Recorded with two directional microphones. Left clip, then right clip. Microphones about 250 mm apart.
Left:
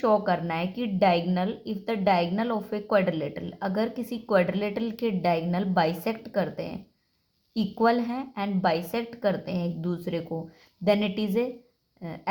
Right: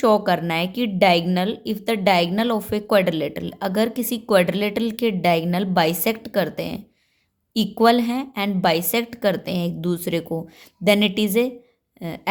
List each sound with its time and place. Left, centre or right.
0.0 s speech: right